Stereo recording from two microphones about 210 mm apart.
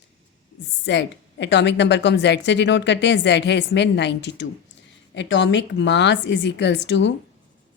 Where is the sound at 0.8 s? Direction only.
55° left (ahead or behind).